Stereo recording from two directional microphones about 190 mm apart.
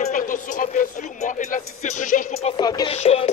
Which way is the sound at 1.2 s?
45° left (ahead or behind).